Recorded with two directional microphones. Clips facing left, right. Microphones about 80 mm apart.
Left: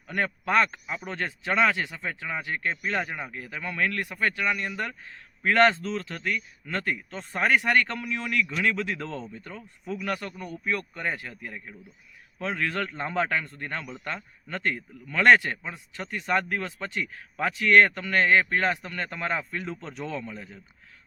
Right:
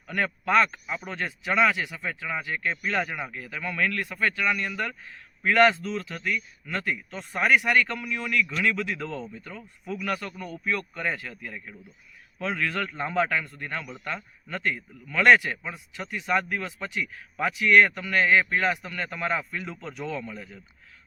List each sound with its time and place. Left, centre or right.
0.1 s speech: left
1.1 s speech: left
5.4 s a man's voice: left
9.8 s speech: left
14.5 s speech: left
16.1 s a man's voice: left